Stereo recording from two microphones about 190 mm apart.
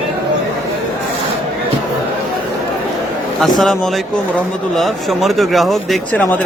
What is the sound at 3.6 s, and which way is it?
Speech, centre (ahead or behind).